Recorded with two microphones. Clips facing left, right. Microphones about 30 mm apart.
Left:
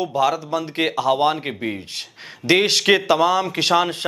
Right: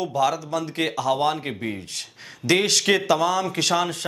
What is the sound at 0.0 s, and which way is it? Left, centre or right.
A man's voice, centre.